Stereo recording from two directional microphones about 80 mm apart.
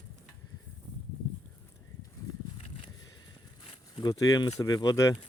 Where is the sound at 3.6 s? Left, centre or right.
Left.